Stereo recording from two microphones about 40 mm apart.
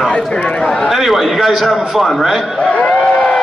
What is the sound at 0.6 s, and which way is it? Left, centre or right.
Speech, centre.